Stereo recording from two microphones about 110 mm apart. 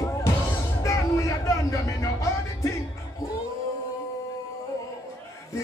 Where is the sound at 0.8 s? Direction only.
30° left (ahead or behind).